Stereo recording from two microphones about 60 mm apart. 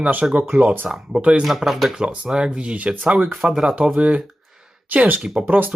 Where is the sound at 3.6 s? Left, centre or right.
Centre.